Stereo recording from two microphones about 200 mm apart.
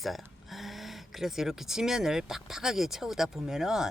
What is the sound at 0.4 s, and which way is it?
A woman's voice, centre (ahead or behind).